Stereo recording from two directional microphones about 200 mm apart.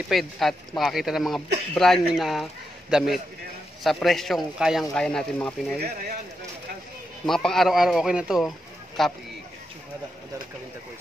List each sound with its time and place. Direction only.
0.1 s a man's voice: centre (ahead or behind)
5.8 s speech: 45° right (ahead or behind)
7.2 s speech: centre (ahead or behind)